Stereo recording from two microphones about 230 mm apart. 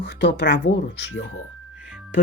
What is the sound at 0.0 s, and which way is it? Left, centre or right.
Speech, left.